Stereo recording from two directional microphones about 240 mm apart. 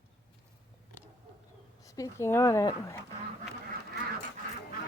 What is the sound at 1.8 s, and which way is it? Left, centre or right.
Speech, centre.